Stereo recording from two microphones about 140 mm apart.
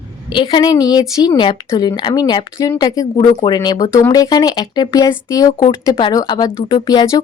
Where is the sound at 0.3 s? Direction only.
35° left (ahead or behind).